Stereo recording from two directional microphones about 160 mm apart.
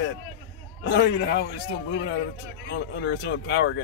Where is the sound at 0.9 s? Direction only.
90° left.